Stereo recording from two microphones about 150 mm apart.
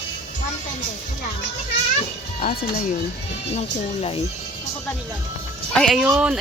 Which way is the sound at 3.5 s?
40° left (ahead or behind).